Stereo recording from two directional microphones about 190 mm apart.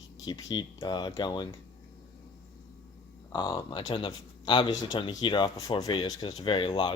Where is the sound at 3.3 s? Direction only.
20° left (ahead or behind).